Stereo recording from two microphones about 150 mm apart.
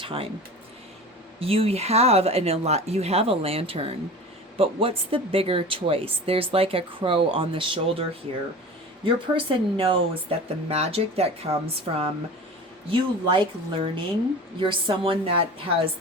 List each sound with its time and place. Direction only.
0.0 s speech: 35° right (ahead or behind)
1.4 s speech: 40° right (ahead or behind)
9.0 s speech: 35° right (ahead or behind)
12.9 s speech: 35° right (ahead or behind)